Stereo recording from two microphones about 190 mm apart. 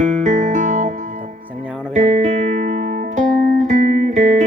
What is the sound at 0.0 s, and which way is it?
Music, 40° right (ahead or behind).